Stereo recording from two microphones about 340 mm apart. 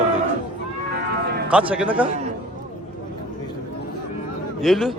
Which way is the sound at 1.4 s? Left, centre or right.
Centre.